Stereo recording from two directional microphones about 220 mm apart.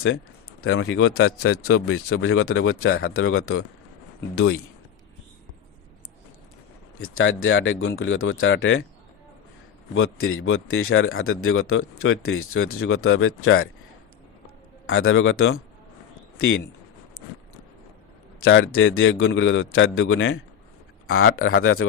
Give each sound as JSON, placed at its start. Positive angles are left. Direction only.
{"t": 0.6, "sound": "speech", "side_deg": 70}
{"t": 2.0, "sound": "speech", "side_deg": 60}
{"t": 7.0, "sound": "a man's voice", "side_deg": 65}
{"t": 9.9, "sound": "speech", "side_deg": 65}
{"t": 14.8, "sound": "a man's voice", "side_deg": 60}
{"t": 18.4, "sound": "a man's voice", "side_deg": 65}